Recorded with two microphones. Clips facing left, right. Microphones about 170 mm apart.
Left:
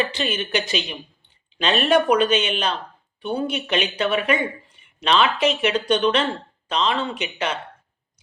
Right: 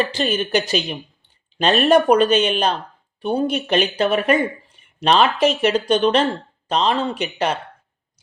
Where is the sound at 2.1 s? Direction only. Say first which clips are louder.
Right 4 dB; 45° right (ahead or behind).